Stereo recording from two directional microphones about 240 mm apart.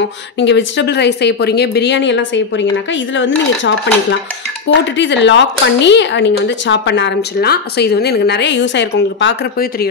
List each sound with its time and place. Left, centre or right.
0.0 s speech: left